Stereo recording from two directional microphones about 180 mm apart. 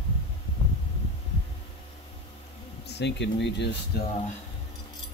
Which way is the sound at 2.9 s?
70° left (ahead or behind).